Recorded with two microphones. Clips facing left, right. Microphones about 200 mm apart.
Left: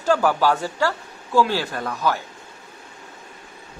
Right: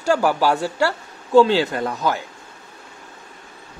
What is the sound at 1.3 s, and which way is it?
Speech, 25° right (ahead or behind).